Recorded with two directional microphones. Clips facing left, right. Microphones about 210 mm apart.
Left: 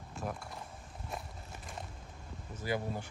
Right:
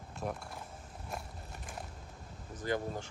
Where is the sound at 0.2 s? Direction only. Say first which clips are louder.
Right 2 dB; centre (ahead or behind).